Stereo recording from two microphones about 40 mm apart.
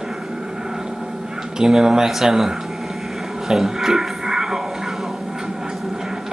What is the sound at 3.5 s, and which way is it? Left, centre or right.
Music, centre.